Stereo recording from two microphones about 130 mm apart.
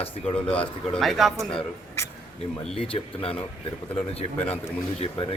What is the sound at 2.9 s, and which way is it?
Speech, 45° left (ahead or behind).